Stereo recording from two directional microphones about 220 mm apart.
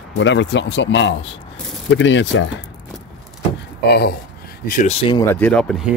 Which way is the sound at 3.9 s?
45° left (ahead or behind).